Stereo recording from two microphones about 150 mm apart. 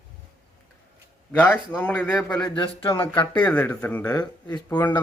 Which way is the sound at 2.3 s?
30° left (ahead or behind).